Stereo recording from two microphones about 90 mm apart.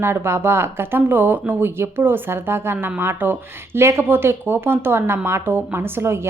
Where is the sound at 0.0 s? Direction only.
30° right (ahead or behind).